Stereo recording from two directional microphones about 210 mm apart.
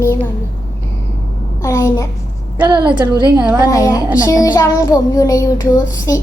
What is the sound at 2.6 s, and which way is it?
Speech, 20° right (ahead or behind).